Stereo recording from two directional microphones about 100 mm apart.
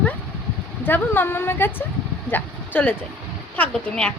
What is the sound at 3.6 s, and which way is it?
Speech, 10° left (ahead or behind).